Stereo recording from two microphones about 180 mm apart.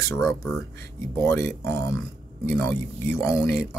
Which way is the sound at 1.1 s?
15° left (ahead or behind).